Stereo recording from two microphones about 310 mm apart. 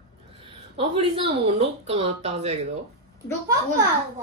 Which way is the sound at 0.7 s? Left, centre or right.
Centre.